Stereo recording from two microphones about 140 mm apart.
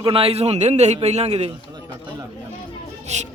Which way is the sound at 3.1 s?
55° right (ahead or behind).